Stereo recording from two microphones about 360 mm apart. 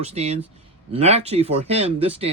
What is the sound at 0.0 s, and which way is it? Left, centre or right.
Speech, centre.